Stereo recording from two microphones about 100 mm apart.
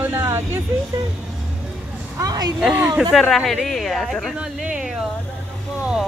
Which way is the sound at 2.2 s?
40° right (ahead or behind).